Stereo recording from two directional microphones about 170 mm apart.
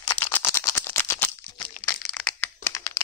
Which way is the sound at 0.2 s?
15° left (ahead or behind).